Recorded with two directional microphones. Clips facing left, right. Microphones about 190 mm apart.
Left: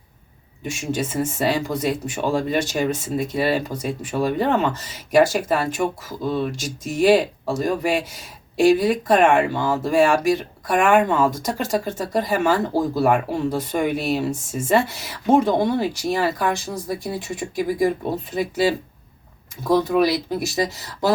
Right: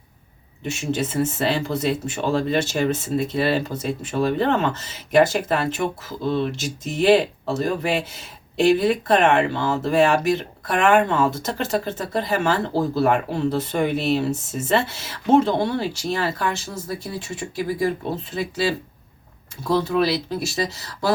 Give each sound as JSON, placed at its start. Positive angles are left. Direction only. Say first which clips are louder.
{"t": 0.6, "sound": "speech", "louder": "right 1 dB", "side_deg": 10}